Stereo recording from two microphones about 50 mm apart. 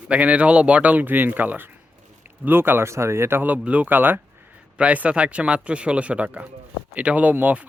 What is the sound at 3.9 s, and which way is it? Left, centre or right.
Speech, right.